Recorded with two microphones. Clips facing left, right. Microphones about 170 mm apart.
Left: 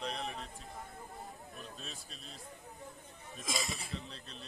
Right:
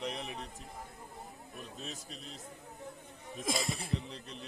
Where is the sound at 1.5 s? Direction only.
20° right (ahead or behind).